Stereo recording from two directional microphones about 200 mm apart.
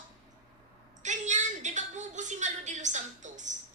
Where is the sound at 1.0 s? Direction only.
35° right (ahead or behind).